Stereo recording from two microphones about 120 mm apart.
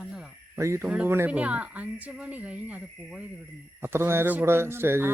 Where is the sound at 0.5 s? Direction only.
25° right (ahead or behind).